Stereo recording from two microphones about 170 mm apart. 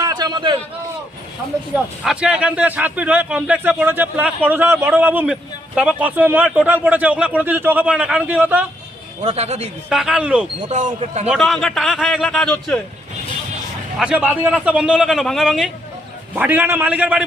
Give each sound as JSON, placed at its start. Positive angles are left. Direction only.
{"t": 0.0, "sound": "a sound", "side_deg": -25}
{"t": 1.7, "sound": "a man's voice", "side_deg": -5}
{"t": 9.2, "sound": "speech", "side_deg": -40}
{"t": 9.9, "sound": "a man's voice", "side_deg": -5}
{"t": 10.7, "sound": "speech", "side_deg": -45}
{"t": 11.3, "sound": "a man's voice", "side_deg": 0}
{"t": 14.0, "sound": "a man's voice", "side_deg": -5}